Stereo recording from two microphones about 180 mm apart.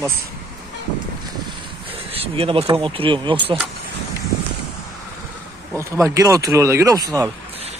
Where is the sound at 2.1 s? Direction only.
30° right (ahead or behind).